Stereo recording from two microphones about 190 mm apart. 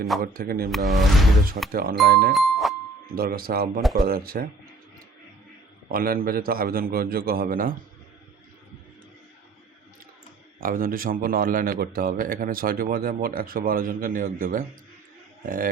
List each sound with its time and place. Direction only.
0.2 s speech: 50° right (ahead or behind)
0.7 s speech: centre (ahead or behind)
1.7 s speech: 50° right (ahead or behind)
2.3 s music: centre (ahead or behind)
3.2 s speech: 50° right (ahead or behind)
3.8 s speech: centre (ahead or behind)
4.0 s speech: 50° right (ahead or behind)
5.9 s speech: 50° right (ahead or behind)
10.6 s speech: 50° right (ahead or behind)